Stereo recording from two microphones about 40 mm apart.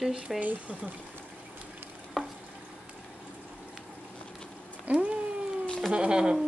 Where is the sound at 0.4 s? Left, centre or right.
Right.